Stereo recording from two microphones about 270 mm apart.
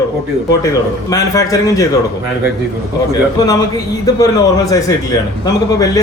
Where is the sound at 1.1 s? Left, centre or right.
Centre.